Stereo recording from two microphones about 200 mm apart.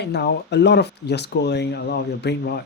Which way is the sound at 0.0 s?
55° left (ahead or behind).